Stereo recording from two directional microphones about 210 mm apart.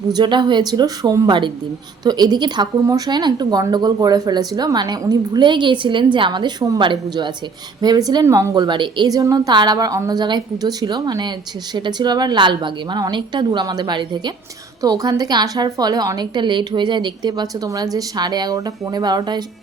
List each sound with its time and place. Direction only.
0.1 s a woman's voice: 20° right (ahead or behind)